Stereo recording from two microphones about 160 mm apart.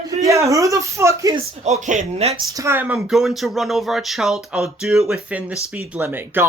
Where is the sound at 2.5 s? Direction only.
15° right (ahead or behind).